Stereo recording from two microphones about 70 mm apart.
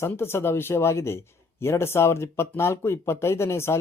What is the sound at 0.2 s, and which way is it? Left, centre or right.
Speech, left.